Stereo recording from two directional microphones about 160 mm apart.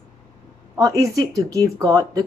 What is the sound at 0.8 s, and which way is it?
Speech, 20° right (ahead or behind).